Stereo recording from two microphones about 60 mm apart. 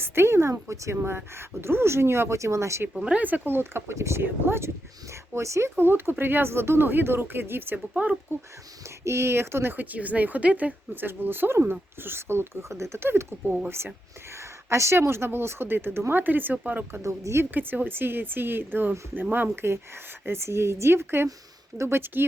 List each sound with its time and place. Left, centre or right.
0.0 s speech: right
0.9 s speech: right
2.9 s speech: centre
3.2 s speech: right
5.1 s speech: right
9.0 s speech: right
13.4 s speech: centre
13.7 s speech: right
17.0 s speech: right
17.5 s speech: right